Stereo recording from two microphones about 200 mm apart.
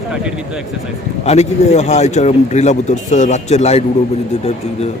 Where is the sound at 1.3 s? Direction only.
35° left (ahead or behind).